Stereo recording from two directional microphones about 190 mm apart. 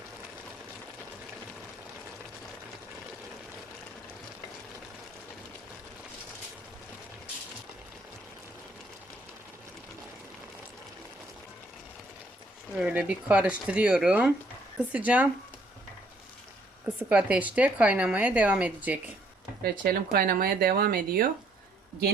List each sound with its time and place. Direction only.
12.8 s a woman's voice: 5° right (ahead or behind)
16.8 s a woman's voice: 5° right (ahead or behind)
19.8 s speech: 50° right (ahead or behind)